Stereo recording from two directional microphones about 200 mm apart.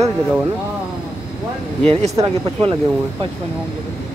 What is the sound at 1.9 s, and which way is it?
Speech, 30° right (ahead or behind).